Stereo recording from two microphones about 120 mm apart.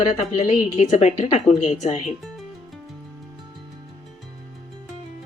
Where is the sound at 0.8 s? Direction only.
75° left (ahead or behind).